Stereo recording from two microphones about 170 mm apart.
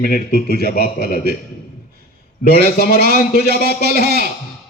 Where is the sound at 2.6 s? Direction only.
60° left (ahead or behind).